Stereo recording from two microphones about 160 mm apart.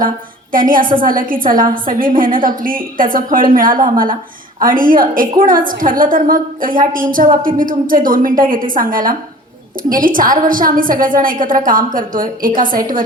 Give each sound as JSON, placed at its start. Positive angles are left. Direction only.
{"t": 0.5, "sound": "a woman's voice", "side_deg": -60}